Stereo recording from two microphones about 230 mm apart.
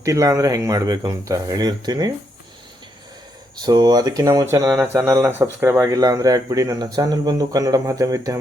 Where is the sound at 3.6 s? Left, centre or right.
Centre.